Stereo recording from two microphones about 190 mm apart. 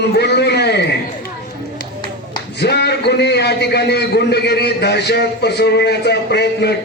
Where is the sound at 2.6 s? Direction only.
60° left (ahead or behind).